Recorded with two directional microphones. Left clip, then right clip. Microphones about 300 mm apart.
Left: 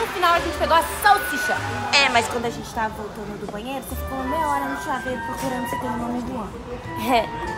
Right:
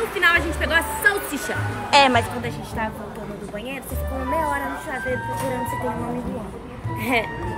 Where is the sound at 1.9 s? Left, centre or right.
Centre.